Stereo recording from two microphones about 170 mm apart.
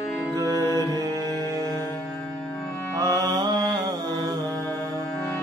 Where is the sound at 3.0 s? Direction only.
20° right (ahead or behind).